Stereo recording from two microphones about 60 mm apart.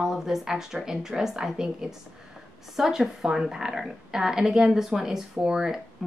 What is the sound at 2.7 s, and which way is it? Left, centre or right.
Speech, centre.